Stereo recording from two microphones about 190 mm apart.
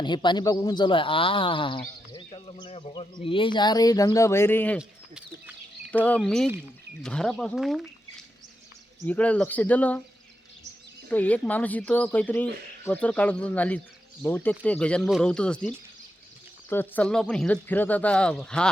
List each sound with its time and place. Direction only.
0.0 s speech: 25° left (ahead or behind)
4.8 s a sound: 5° right (ahead or behind)
5.9 s speech: 10° left (ahead or behind)
9.0 s speech: 5° left (ahead or behind)
11.1 s speech: 10° left (ahead or behind)